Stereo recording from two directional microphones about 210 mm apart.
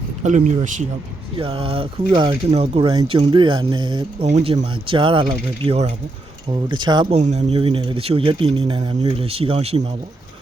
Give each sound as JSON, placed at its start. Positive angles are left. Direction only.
{"t": 0.2, "sound": "speech", "side_deg": -35}
{"t": 4.3, "sound": "speech", "side_deg": -30}
{"t": 7.2, "sound": "speech", "side_deg": -30}